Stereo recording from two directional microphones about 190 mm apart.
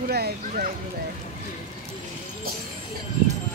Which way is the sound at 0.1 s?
55° right (ahead or behind).